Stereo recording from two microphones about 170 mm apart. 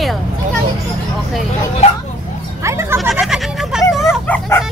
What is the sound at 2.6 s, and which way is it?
Speech, 15° right (ahead or behind).